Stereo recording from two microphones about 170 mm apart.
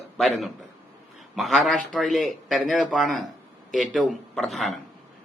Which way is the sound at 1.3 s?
Centre (ahead or behind).